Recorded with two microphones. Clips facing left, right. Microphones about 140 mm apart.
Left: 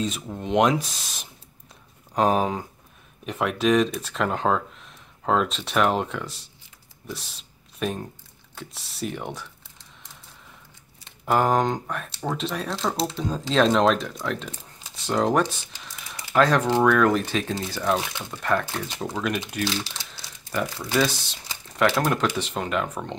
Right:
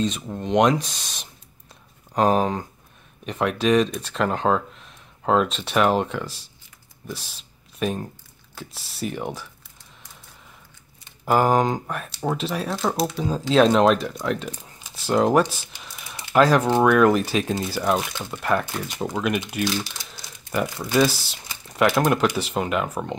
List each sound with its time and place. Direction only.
0.0 s speech: 5° left (ahead or behind)
11.2 s speech: 5° right (ahead or behind)
19.6 s speech: 30° left (ahead or behind)
20.9 s speech: 10° right (ahead or behind)